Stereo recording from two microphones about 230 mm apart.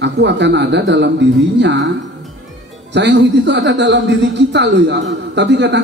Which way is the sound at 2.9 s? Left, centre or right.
Right.